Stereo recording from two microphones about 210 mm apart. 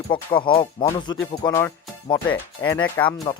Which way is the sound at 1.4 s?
10° left (ahead or behind).